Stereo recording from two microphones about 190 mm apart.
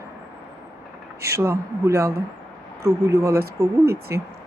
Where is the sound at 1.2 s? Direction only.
15° right (ahead or behind).